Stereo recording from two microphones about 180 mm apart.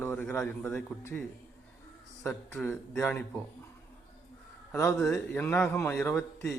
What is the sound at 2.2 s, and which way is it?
Speech, 10° left (ahead or behind).